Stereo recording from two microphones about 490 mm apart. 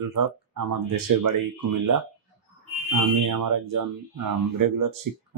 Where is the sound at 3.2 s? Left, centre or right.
Right.